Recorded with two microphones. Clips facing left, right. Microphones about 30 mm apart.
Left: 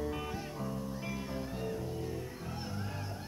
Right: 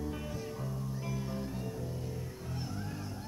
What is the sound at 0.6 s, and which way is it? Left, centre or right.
Music, centre.